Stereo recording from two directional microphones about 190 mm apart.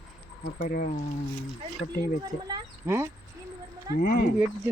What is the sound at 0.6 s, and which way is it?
Speech, 45° left (ahead or behind).